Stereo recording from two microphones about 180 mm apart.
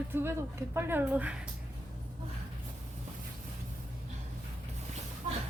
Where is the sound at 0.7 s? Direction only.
10° right (ahead or behind).